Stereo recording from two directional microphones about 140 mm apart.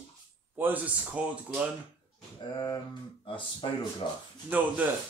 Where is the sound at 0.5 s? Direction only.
10° right (ahead or behind).